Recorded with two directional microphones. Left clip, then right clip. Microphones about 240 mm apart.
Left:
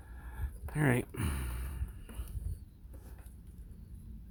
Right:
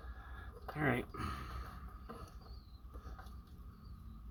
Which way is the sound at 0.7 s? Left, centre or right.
Left.